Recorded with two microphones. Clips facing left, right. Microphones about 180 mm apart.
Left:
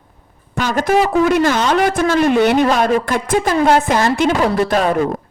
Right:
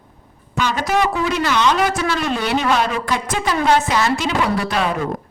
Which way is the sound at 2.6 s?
45° left (ahead or behind).